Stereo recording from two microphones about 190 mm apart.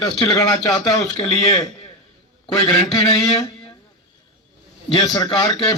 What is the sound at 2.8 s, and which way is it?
Speech, 20° left (ahead or behind).